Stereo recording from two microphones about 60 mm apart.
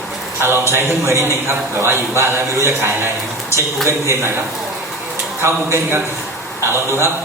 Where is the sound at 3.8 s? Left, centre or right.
Right.